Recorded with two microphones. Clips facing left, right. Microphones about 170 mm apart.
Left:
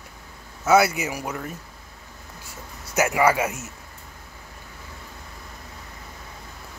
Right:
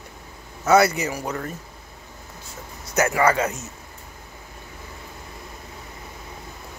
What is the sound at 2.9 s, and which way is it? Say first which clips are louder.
Speech: even; 10° left (ahead or behind).